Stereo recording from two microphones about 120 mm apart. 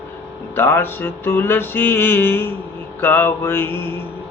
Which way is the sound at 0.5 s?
20° left (ahead or behind).